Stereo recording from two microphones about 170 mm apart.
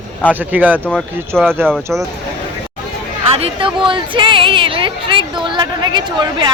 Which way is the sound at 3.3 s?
30° right (ahead or behind).